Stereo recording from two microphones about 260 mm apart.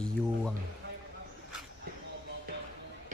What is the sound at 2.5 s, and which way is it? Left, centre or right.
Basketball bounce, right.